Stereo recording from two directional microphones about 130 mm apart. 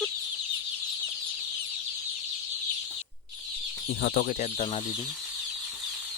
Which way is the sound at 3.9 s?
90° left.